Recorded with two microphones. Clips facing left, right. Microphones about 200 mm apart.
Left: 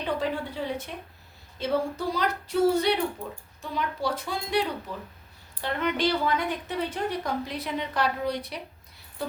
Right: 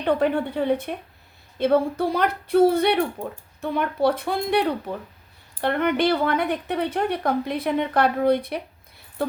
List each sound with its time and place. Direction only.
0.0 s a woman's voice: 60° right (ahead or behind)